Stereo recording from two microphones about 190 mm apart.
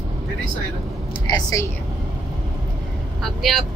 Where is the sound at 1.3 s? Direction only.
15° left (ahead or behind).